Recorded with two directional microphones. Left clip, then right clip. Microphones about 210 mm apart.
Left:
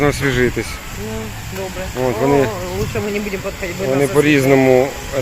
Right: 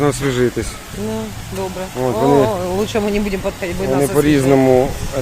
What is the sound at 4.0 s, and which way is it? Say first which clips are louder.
Speech: left 1 dB; centre (ahead or behind).